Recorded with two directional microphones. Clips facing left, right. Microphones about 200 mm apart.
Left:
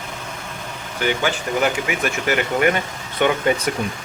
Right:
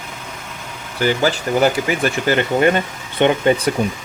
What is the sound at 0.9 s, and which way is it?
Speech, 35° right (ahead or behind).